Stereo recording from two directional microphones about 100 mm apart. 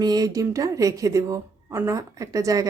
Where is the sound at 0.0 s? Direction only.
40° right (ahead or behind).